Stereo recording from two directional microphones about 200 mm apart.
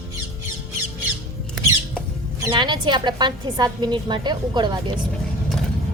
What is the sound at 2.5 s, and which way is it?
A woman's voice, 25° right (ahead or behind).